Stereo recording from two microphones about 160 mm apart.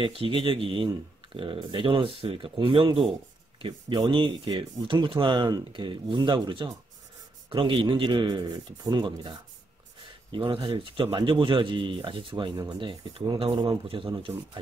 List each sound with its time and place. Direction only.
0.0 s speech: 35° right (ahead or behind)
10.3 s speech: 30° right (ahead or behind)